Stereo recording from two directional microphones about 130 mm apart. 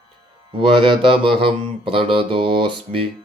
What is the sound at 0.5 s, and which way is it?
Mantra, 40° right (ahead or behind).